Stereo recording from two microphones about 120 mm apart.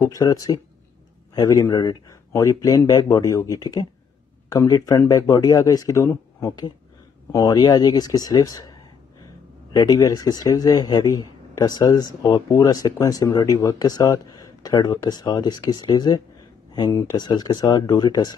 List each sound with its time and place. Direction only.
0.0 s a man's voice: 30° left (ahead or behind)
9.8 s a man's voice: 35° left (ahead or behind)
17.2 s a man's voice: 35° left (ahead or behind)